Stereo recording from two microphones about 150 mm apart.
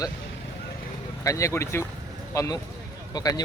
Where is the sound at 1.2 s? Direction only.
20° left (ahead or behind).